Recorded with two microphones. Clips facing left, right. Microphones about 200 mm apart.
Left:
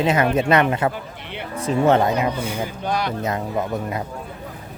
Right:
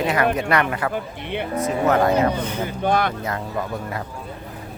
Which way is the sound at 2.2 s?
10° left (ahead or behind).